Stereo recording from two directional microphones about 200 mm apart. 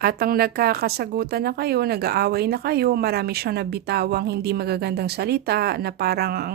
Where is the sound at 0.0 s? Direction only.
50° right (ahead or behind).